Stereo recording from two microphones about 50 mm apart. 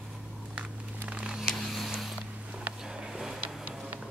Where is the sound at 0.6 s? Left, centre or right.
Right.